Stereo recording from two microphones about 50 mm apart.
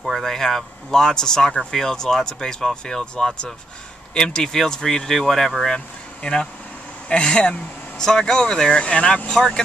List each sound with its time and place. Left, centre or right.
0.0 s speech: centre